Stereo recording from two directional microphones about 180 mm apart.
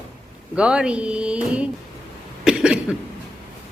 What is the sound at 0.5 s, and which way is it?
A woman's voice, 5° right (ahead or behind).